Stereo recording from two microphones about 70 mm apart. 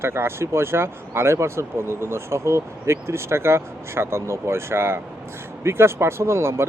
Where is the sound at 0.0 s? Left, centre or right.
Right.